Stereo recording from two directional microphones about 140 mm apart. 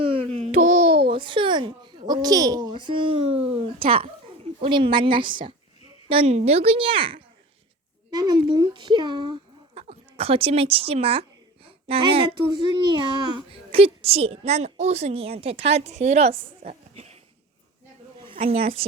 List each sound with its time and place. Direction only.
0.0 s babbling: 40° right (ahead or behind)
0.5 s babbling: 65° right (ahead or behind); by 1.1 s 90° right
1.1 s a child's voice: 35° right (ahead or behind)
2.2 s a child's voice: 25° right (ahead or behind)
9.7 s a woman's voice: 45° right (ahead or behind)
18.2 s a woman's voice: 40° right (ahead or behind)